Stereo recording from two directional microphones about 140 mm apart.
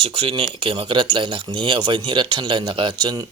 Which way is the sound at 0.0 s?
40° right (ahead or behind).